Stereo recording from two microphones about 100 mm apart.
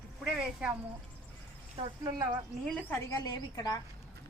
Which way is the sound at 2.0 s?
40° right (ahead or behind).